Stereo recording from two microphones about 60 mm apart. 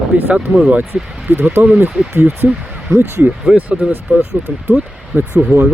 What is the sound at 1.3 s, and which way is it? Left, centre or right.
Speech, right.